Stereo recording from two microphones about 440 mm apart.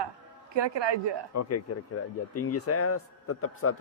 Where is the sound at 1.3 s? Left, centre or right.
Left.